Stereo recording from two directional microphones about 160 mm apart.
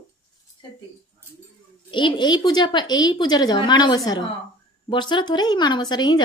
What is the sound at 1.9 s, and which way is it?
Speech, 30° left (ahead or behind).